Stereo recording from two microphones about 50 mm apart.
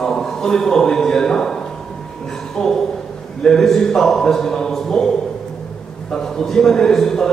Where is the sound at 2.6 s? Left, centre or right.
Centre.